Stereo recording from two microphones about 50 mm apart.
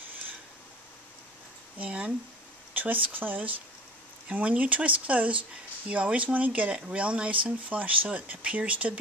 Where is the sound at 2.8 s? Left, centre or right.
Right.